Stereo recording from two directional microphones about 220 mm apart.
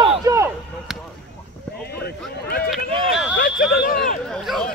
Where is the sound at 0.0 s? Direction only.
20° right (ahead or behind).